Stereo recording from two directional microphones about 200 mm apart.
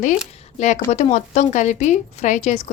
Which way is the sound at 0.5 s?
35° left (ahead or behind).